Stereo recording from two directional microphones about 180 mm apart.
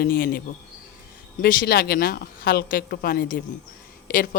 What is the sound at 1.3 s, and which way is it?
Speech, 50° left (ahead or behind).